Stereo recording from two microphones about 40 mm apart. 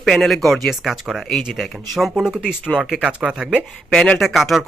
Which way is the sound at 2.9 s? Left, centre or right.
Right.